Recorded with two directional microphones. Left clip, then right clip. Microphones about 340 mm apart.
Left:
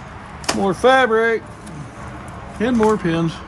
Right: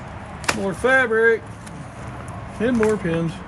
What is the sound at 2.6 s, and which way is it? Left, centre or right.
Speech, centre.